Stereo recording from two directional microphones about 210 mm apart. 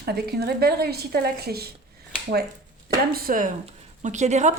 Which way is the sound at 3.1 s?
45° right (ahead or behind).